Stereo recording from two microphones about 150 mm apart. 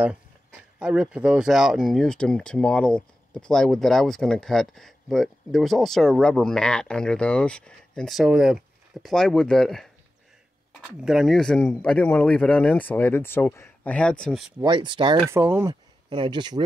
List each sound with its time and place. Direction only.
0.7 s speech: 5° right (ahead or behind)
11.0 s speech: 5° right (ahead or behind)
14.6 s speech: 30° right (ahead or behind)
15.2 s speech: 15° right (ahead or behind)
15.7 s speech: 30° right (ahead or behind)